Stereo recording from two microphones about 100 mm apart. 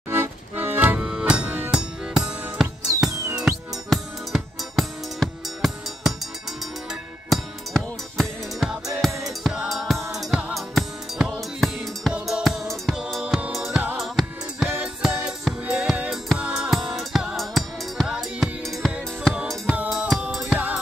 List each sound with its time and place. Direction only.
0.1 s accordion: 25° right (ahead or behind)
1.0 s music: 5° right (ahead or behind)
20.5 s music: 15° right (ahead or behind)